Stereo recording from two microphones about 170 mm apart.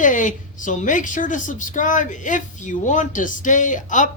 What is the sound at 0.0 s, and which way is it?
Speech, 50° left (ahead or behind).